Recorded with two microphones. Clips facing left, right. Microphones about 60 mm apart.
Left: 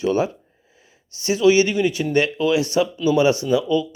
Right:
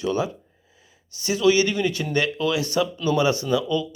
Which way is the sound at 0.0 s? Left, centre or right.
Left.